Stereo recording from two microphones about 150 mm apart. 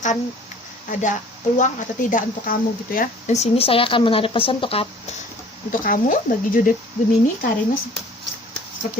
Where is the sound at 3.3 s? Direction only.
45° left (ahead or behind).